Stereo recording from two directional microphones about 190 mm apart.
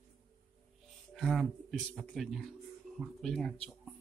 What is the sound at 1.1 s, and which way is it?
Speech, centre (ahead or behind).